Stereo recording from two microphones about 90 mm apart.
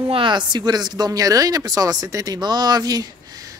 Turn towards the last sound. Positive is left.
turn(degrees=-45)  # may be behind; listen again after turning